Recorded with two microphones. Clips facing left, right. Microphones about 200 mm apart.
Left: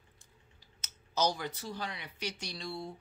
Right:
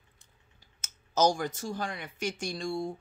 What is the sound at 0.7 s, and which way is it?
Speech, 45° right (ahead or behind).